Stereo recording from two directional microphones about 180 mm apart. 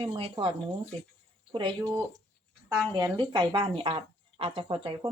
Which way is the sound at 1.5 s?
25° right (ahead or behind).